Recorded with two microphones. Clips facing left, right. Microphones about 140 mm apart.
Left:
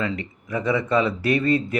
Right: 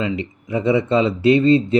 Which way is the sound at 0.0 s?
20° right (ahead or behind).